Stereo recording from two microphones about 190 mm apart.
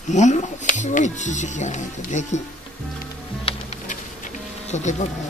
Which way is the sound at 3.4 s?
35° left (ahead or behind).